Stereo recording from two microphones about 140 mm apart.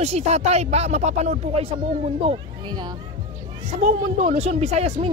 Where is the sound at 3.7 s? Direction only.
50° right (ahead or behind).